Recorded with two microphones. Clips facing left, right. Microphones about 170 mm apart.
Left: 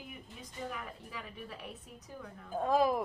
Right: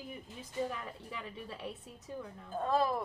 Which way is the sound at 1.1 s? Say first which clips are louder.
Right 1 dB; 25° right (ahead or behind).